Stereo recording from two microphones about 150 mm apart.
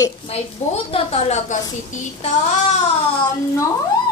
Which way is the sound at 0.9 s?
45° left (ahead or behind).